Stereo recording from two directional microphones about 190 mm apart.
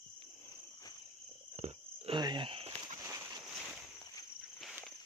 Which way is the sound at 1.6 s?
35° right (ahead or behind).